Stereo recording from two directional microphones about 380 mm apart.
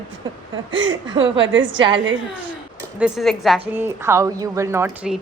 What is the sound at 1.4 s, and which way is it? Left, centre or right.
Speech, right.